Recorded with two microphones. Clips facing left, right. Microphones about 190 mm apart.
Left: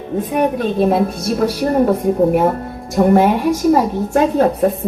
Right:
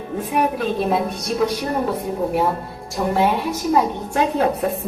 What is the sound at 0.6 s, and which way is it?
A woman's voice, 45° left (ahead or behind).